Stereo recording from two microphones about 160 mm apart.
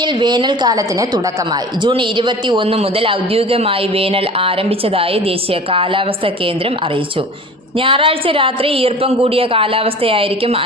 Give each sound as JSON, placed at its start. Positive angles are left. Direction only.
{"t": 0.0, "sound": "a woman's voice", "side_deg": -30}
{"t": 7.8, "sound": "a man's voice", "side_deg": -35}